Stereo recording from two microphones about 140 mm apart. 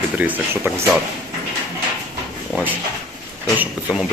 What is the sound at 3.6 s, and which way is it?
Speech, 5° right (ahead or behind).